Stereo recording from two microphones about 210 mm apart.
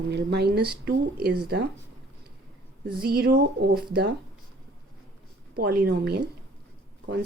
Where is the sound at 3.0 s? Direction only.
50° right (ahead or behind).